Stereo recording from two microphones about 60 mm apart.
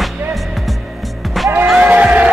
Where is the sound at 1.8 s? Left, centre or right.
Right.